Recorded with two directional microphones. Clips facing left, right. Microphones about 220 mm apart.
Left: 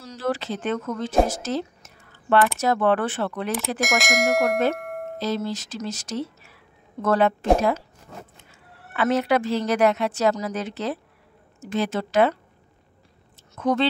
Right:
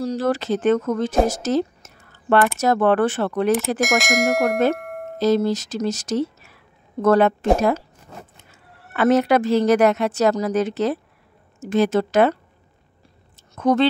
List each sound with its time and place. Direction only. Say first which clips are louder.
0.0 s speech: right 6 dB; 40° right (ahead or behind)
3.8 s speech: right 3 dB; centre (ahead or behind)
4.7 s music: even; centre (ahead or behind)
5.2 s speech: right 9 dB; 45° right (ahead or behind)
8.5 s a woman's voice: even; 45° right (ahead or behind)
13.6 s speech: right 4 dB; 45° right (ahead or behind)